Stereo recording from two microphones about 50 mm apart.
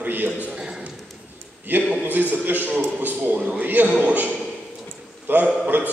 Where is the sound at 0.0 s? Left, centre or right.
Right.